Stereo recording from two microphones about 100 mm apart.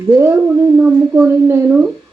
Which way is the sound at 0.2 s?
20° right (ahead or behind).